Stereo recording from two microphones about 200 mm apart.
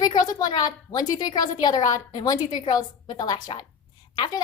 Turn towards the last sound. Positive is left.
turn(degrees=20)  # may be behind; listen again after turning